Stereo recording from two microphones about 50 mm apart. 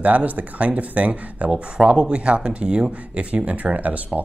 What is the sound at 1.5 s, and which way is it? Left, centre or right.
Speech, centre.